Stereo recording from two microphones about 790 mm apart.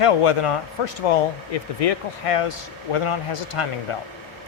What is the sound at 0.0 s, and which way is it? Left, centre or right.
Speech, left.